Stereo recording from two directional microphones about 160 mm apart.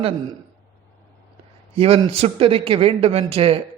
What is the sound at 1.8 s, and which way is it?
A man's voice, 35° right (ahead or behind).